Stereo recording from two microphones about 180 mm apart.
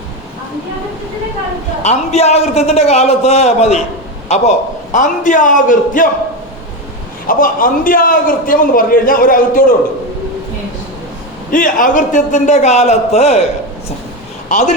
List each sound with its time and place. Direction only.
1.8 s a man's voice: 40° left (ahead or behind)
7.3 s a man's voice: 50° left (ahead or behind)
11.5 s a man's voice: 45° left (ahead or behind)